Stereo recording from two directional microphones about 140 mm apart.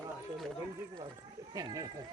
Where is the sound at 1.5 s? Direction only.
25° right (ahead or behind).